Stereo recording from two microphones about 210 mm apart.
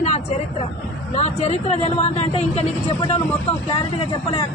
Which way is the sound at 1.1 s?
30° left (ahead or behind).